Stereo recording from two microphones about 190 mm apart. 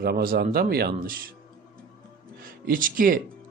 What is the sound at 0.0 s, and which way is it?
Speech, 50° right (ahead or behind).